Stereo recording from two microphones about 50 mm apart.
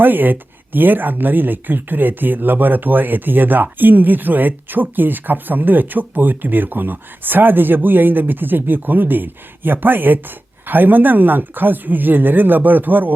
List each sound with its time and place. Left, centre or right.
0.0 s speech: right